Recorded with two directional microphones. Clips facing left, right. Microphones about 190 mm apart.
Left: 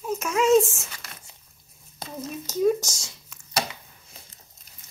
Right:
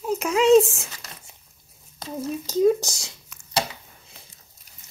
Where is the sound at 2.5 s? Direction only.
35° right (ahead or behind).